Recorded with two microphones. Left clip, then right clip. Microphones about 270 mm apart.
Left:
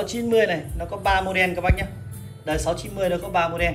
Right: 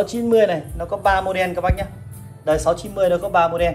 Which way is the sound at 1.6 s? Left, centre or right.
Right.